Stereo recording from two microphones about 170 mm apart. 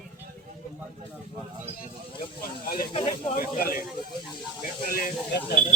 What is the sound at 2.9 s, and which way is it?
Speech, 30° left (ahead or behind).